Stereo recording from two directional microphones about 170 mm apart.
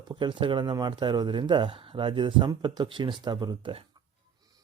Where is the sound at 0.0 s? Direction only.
25° right (ahead or behind).